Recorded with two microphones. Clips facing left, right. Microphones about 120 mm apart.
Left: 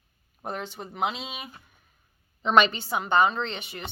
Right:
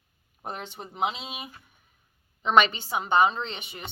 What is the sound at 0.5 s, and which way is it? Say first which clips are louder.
A woman's voice: left 1 dB; 20° right (ahead or behind).